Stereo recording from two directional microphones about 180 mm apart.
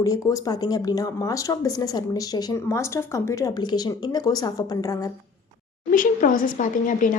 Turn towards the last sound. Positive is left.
turn(degrees=45)  # may be behind; listen again after turning